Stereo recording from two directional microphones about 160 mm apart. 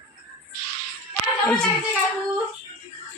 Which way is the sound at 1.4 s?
5° left (ahead or behind).